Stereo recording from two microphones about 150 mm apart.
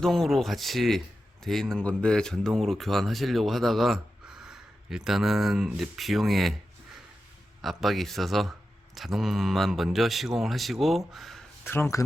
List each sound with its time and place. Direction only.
0.0 s speech: centre (ahead or behind)
7.6 s speech: centre (ahead or behind)
11.6 s speech: 15° left (ahead or behind)